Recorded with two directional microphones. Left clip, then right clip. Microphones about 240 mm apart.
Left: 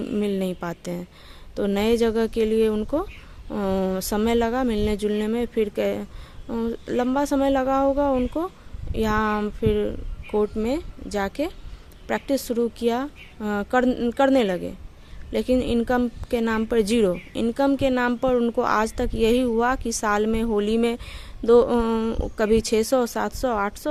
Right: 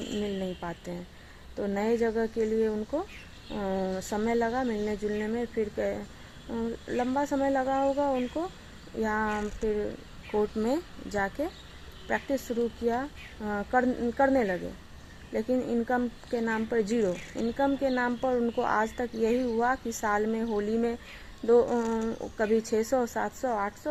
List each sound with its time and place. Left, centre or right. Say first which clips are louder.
0.2 s speech: left 8 dB; left